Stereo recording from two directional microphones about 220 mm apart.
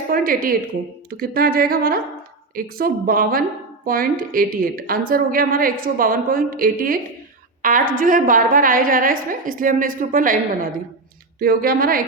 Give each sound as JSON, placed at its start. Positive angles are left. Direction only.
{"t": 0.1, "sound": "a woman's voice", "side_deg": -40}